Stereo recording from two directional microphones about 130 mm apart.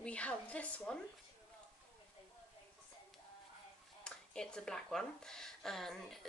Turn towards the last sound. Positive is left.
turn(degrees=0)  # may be behind; listen again after turning